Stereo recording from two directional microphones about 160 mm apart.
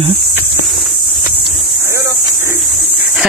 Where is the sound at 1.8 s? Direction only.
15° right (ahead or behind).